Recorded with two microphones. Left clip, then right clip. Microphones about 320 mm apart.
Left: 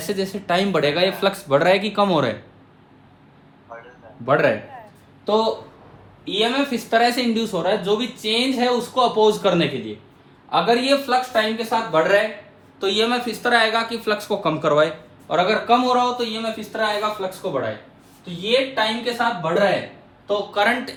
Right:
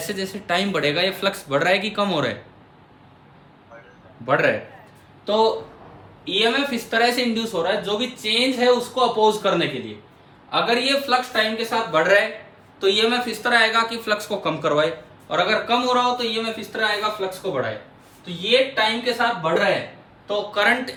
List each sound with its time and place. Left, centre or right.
0.0 s speech: centre
4.3 s speech: centre
10.7 s speech: centre
16.6 s speech: centre
18.4 s speech: centre